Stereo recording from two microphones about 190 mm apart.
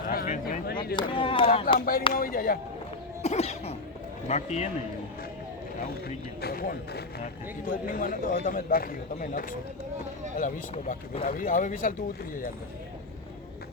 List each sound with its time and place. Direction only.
0.1 s speech: 50° left (ahead or behind)
0.9 s speech: 25° left (ahead or behind)
1.8 s speech: 50° left (ahead or behind)
3.2 s cough: 35° left (ahead or behind)
6.4 s speech: 50° left (ahead or behind)